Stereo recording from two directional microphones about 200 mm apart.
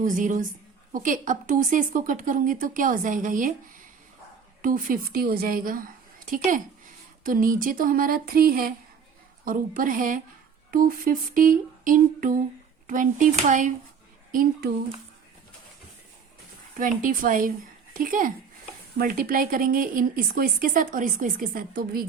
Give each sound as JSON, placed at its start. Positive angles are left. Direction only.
{"t": 0.0, "sound": "speech", "side_deg": -40}
{"t": 4.6, "sound": "speech", "side_deg": -45}
{"t": 16.7, "sound": "speech", "side_deg": -40}